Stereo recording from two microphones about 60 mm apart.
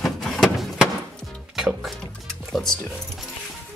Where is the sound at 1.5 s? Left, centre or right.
Centre.